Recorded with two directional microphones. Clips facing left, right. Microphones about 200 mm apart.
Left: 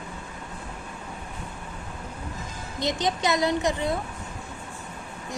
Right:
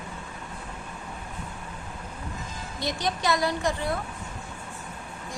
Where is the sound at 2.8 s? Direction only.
20° left (ahead or behind).